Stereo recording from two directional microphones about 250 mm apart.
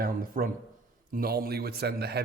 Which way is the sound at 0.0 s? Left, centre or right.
Right.